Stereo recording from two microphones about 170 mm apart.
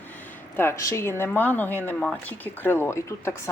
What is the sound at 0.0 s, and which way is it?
Speech, 10° left (ahead or behind).